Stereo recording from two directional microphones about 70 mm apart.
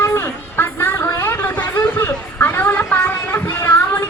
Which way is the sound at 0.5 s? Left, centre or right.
Left.